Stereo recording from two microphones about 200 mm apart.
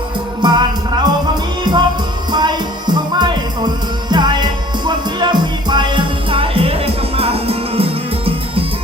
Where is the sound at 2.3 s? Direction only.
20° right (ahead or behind).